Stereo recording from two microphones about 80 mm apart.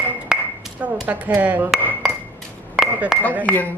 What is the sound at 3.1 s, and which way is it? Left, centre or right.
Speech, centre.